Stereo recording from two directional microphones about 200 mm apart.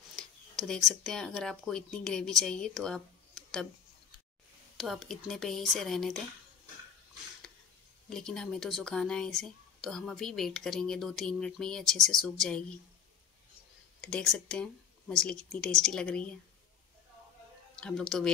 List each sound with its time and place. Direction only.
0.6 s speech: centre (ahead or behind)
4.7 s speech: centre (ahead or behind)
8.1 s speech: 5° left (ahead or behind)
14.0 s speech: 5° left (ahead or behind)
17.7 s speech: 5° left (ahead or behind)